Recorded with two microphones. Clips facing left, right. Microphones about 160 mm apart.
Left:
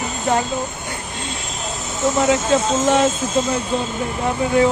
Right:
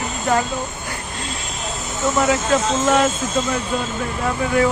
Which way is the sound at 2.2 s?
20° left (ahead or behind).